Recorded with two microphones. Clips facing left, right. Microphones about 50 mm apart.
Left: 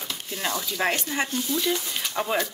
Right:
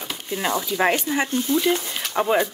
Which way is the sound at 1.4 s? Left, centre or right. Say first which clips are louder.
Right 6 dB; right.